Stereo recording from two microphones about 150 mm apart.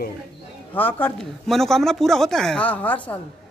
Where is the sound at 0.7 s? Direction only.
15° left (ahead or behind).